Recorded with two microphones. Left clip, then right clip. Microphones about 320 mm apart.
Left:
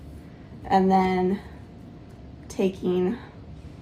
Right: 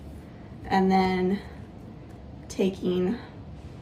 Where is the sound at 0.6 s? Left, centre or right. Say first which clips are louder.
Left 3 dB; centre.